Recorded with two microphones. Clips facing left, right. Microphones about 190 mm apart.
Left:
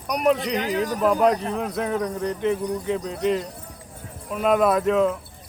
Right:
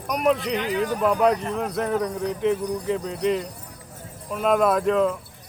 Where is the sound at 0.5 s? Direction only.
40° left (ahead or behind).